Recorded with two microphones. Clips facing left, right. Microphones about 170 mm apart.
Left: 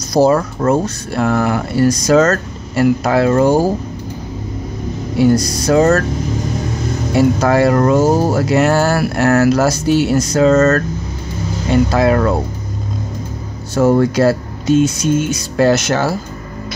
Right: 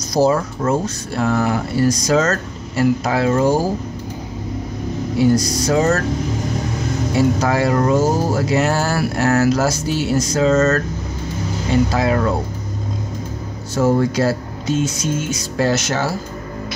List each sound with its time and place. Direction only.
0.1 s speech: 65° left (ahead or behind)
5.2 s speech: 60° left (ahead or behind)
7.2 s speech: 65° left (ahead or behind)
13.7 s speech: 65° left (ahead or behind)